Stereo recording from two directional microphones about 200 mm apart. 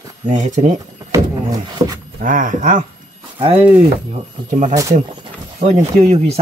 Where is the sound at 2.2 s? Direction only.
40° right (ahead or behind).